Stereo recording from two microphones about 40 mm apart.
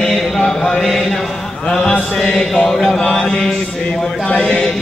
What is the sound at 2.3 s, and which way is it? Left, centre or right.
Mantra, centre.